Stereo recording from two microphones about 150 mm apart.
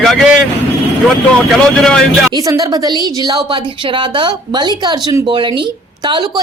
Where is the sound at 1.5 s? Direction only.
5° left (ahead or behind).